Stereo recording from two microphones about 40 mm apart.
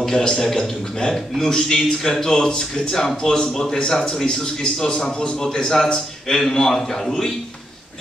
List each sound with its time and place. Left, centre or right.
0.0 s a man's voice: centre